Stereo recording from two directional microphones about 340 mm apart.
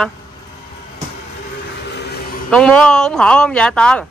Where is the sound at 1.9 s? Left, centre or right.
Left.